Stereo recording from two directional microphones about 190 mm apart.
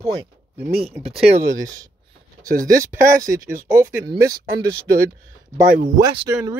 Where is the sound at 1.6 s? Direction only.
20° right (ahead or behind).